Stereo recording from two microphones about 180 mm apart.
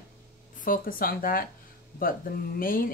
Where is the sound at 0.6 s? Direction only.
50° left (ahead or behind).